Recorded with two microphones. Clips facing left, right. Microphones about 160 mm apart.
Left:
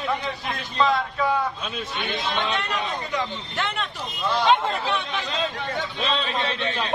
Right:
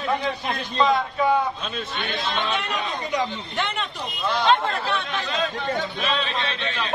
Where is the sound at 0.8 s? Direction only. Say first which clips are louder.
Right 1 dB; centre (ahead or behind).